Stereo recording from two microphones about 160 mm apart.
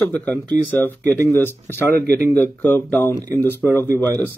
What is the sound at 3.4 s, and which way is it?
Speech, 15° left (ahead or behind).